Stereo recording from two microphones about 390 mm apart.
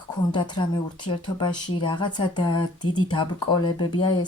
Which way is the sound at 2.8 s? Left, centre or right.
Left.